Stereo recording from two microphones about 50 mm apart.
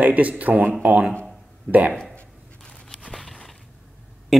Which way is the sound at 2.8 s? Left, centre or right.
Centre.